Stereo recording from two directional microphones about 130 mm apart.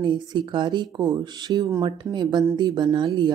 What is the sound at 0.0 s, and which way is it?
Speech, 35° right (ahead or behind).